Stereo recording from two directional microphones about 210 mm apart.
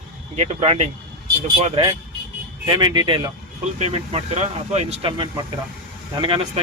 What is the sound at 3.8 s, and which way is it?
Speech, 30° right (ahead or behind).